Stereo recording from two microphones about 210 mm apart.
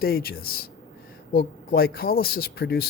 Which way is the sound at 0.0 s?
45° left (ahead or behind).